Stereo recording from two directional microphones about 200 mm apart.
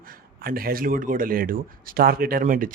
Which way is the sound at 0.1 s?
45° right (ahead or behind).